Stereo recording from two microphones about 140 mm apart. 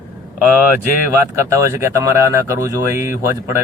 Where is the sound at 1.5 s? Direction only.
20° right (ahead or behind).